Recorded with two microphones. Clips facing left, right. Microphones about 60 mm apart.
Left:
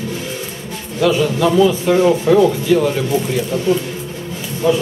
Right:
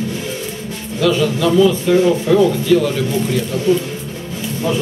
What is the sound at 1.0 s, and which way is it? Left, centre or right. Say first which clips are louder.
Speech: left 1 dB; centre.